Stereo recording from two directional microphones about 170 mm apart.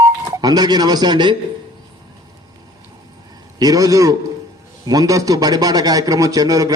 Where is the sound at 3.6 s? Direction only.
20° right (ahead or behind).